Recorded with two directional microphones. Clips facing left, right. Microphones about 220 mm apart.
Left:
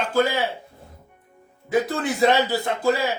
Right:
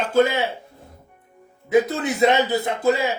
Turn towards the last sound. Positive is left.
turn(degrees=-20)  # may be behind; listen again after turning